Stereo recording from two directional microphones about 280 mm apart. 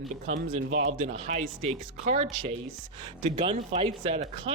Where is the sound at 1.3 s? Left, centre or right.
Right.